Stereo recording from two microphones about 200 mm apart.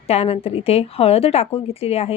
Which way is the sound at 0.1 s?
30° left (ahead or behind).